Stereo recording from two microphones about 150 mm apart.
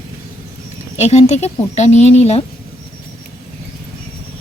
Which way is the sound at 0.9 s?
45° left (ahead or behind).